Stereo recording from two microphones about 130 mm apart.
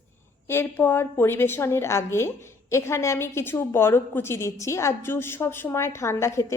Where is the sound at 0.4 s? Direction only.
15° left (ahead or behind).